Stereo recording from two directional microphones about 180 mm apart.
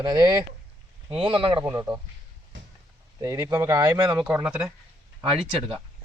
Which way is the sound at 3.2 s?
15° right (ahead or behind).